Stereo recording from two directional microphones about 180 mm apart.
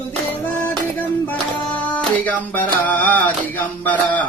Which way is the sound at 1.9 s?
10° left (ahead or behind).